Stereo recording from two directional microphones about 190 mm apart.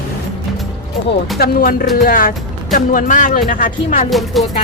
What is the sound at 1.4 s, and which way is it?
Speech, 50° left (ahead or behind).